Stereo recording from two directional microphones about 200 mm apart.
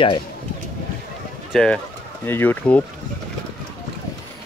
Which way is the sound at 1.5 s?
5° left (ahead or behind).